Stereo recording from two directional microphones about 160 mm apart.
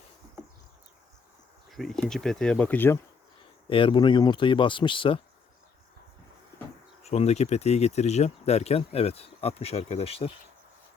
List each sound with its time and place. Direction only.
1.7 s speech: centre (ahead or behind)
3.7 s speech: 35° left (ahead or behind)
7.0 s speech: 40° left (ahead or behind)